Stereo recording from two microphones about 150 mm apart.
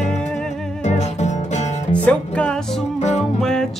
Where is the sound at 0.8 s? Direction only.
50° left (ahead or behind).